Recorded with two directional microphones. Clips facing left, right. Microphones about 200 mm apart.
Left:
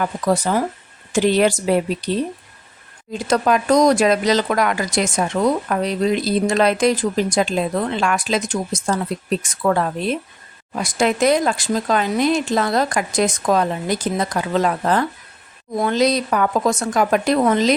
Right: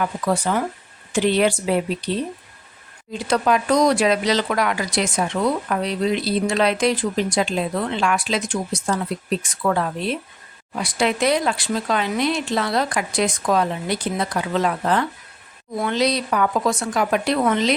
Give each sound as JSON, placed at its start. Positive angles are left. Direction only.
{"t": 0.0, "sound": "speech", "side_deg": 40}
{"t": 3.1, "sound": "speech", "side_deg": 45}